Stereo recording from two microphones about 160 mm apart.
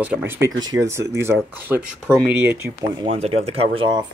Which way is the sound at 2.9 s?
35° right (ahead or behind).